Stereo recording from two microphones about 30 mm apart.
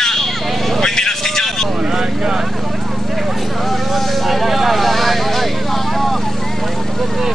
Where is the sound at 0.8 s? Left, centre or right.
Centre.